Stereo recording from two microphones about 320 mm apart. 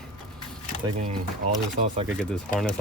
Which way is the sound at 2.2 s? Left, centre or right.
Centre.